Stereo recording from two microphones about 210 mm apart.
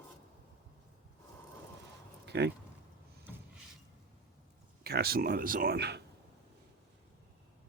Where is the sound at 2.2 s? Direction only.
50° right (ahead or behind).